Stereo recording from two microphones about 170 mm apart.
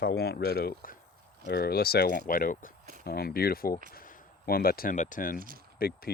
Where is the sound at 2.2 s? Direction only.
55° left (ahead or behind).